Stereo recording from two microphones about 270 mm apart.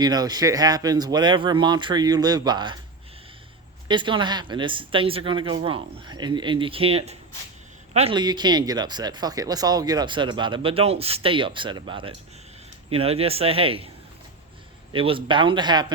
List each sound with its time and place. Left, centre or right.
0.0 s speech: centre
3.8 s speech: centre
14.9 s speech: centre